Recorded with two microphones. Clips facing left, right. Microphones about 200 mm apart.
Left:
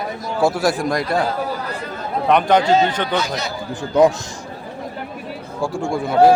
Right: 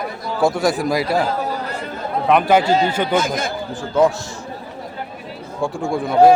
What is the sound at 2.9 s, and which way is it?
Speech, 10° right (ahead or behind).